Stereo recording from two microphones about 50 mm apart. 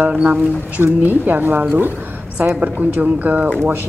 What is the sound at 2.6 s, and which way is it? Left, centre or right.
Speech, right.